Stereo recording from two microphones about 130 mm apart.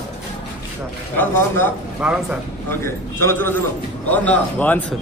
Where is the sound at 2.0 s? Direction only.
10° right (ahead or behind).